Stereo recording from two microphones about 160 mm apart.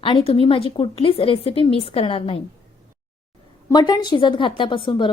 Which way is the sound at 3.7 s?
25° left (ahead or behind).